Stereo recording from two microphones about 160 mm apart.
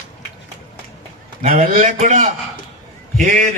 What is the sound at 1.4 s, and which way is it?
Speech, 50° right (ahead or behind).